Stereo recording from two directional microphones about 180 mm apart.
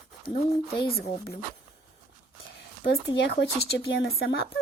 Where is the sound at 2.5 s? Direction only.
65° left (ahead or behind).